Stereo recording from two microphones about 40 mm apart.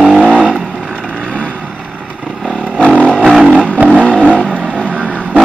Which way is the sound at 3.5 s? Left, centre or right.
Right.